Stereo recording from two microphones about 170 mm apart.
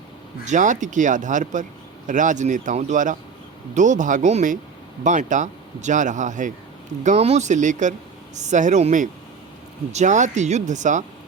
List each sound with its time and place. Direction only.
0.4 s a man's voice: 50° right (ahead or behind)